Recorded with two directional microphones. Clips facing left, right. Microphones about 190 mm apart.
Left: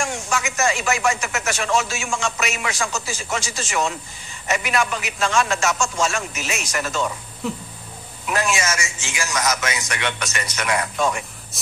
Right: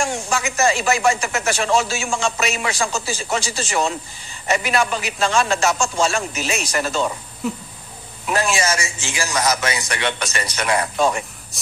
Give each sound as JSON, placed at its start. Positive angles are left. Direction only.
{"t": 0.0, "sound": "speech", "side_deg": -30}
{"t": 7.4, "sound": "a sound", "side_deg": 0}
{"t": 8.3, "sound": "speech", "side_deg": -30}